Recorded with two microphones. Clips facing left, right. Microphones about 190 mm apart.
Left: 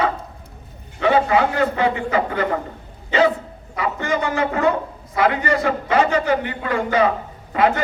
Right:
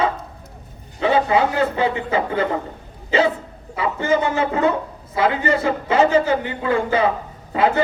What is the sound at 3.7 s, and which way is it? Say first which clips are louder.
A man's voice: right 3 dB; 25° right (ahead or behind).